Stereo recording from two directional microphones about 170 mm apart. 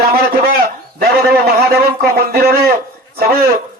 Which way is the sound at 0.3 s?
60° right (ahead or behind).